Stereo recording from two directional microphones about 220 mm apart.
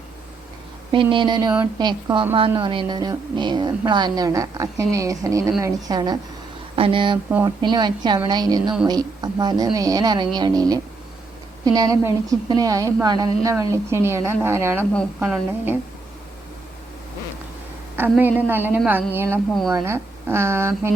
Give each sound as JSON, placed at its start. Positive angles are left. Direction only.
{"t": 0.9, "sound": "a woman's voice", "side_deg": -20}
{"t": 18.2, "sound": "speech", "side_deg": -10}